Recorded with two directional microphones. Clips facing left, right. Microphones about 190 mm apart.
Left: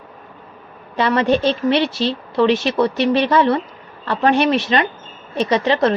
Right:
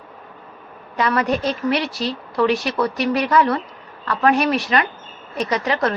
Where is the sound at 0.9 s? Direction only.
30° left (ahead or behind).